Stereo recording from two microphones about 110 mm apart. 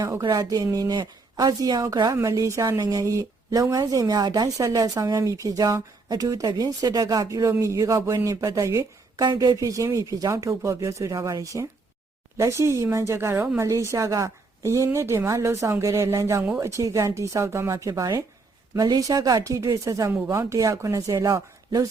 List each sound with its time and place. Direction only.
0.2 s a woman's voice: 35° right (ahead or behind); by 13.6 s 15° right (ahead or behind)
13.6 s a woman's voice: 30° right (ahead or behind)